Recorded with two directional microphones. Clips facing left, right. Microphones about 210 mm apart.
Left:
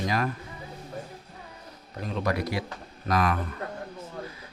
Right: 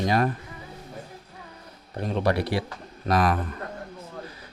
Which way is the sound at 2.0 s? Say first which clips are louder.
Right 4 dB; 30° right (ahead or behind).